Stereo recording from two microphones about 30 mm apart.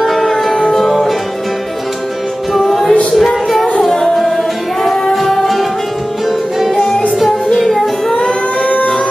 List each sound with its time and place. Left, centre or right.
0.0 s music: centre
2.5 s music: centre
5.1 s music: centre
8.2 s music: left